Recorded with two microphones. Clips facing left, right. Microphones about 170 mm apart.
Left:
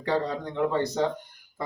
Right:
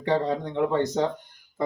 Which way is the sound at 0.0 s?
20° right (ahead or behind).